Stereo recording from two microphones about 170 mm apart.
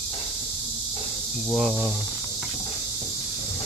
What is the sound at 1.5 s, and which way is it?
Cricket, centre (ahead or behind).